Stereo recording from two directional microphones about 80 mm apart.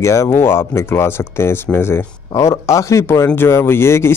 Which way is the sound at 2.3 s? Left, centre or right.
Left.